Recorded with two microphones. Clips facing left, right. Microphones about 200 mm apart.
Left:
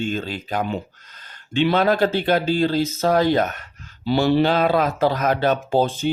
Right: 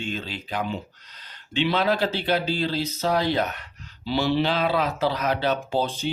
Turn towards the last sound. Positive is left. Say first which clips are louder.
# left 6 dB
turn(degrees=50)  # may be behind; listen again after turning